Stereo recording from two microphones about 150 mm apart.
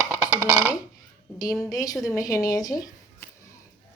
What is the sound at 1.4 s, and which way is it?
A woman's voice, 20° left (ahead or behind).